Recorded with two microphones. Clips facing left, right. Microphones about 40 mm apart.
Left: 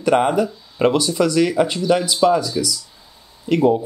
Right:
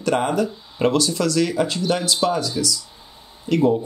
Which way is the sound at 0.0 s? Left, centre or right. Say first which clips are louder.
Left 4 dB; centre.